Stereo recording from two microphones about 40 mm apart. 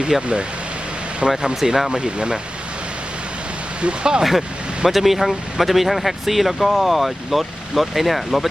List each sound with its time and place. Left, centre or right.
0.1 s speech: centre
1.4 s speech: centre
3.8 s speech: right
4.2 s speech: centre